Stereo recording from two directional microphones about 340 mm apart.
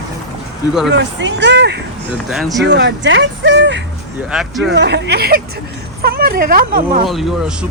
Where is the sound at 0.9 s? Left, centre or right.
Right.